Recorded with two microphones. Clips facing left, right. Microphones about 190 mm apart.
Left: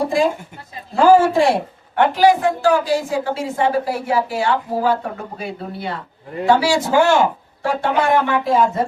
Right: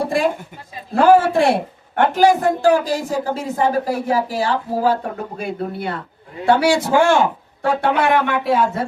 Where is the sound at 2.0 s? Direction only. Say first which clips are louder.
Even; 45° right (ahead or behind).